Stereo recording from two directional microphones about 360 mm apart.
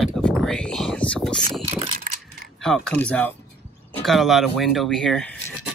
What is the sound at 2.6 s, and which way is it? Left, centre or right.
Speech, centre.